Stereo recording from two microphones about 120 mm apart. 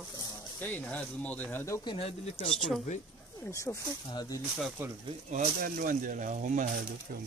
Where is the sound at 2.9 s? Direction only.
90° left.